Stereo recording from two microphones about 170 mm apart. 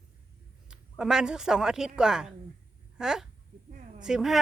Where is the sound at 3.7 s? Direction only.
50° right (ahead or behind).